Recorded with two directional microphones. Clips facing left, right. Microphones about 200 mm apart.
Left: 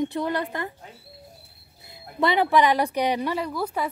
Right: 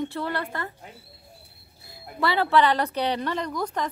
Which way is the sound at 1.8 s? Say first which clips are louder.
Left 3 dB; 20° left (ahead or behind).